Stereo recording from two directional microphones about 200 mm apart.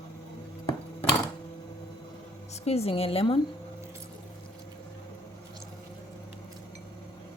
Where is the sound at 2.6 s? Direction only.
30° left (ahead or behind).